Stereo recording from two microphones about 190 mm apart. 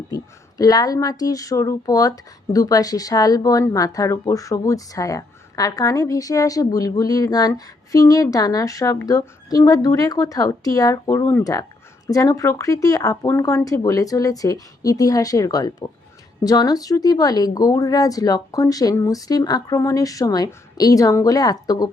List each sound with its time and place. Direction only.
0.1 s speech: 20° left (ahead or behind)